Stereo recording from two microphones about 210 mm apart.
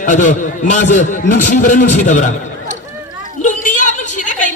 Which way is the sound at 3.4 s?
35° left (ahead or behind).